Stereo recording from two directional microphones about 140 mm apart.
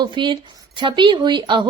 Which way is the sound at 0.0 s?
35° right (ahead or behind).